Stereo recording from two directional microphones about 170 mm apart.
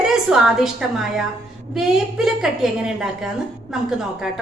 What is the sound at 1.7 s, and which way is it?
A woman's voice, 5° right (ahead or behind).